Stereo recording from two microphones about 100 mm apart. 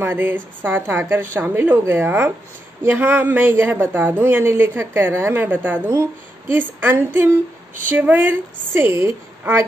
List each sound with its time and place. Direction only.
0.0 s speech: 20° right (ahead or behind)